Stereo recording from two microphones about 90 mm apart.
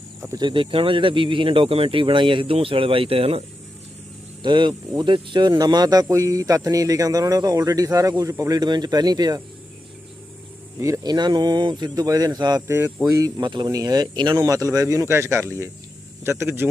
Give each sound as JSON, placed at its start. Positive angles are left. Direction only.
{"t": 0.3, "sound": "speech", "side_deg": -65}
{"t": 4.4, "sound": "speech", "side_deg": -60}
{"t": 10.8, "sound": "speech", "side_deg": -35}
{"t": 12.6, "sound": "speech", "side_deg": -30}
{"t": 13.1, "sound": "speech", "side_deg": -40}
{"t": 13.4, "sound": "speech", "side_deg": -55}
{"t": 14.4, "sound": "speech", "side_deg": -40}